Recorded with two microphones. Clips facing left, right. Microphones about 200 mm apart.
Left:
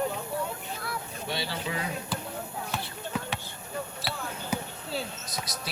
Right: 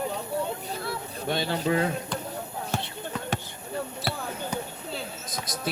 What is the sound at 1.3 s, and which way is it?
Speech, 50° right (ahead or behind).